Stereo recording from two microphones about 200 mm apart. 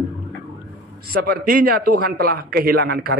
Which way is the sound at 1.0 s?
50° right (ahead or behind).